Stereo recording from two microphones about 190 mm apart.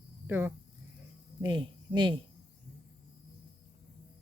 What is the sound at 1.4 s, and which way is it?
Speech, 25° right (ahead or behind).